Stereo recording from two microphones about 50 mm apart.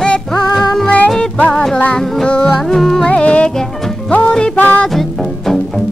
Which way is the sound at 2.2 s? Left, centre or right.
Left.